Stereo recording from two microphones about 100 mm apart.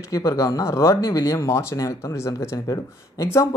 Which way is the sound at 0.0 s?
30° left (ahead or behind).